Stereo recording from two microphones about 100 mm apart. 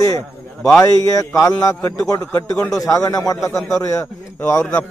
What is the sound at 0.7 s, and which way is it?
A man's voice, 35° left (ahead or behind).